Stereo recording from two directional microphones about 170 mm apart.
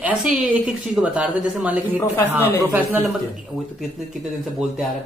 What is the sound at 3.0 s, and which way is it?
Speech, centre (ahead or behind).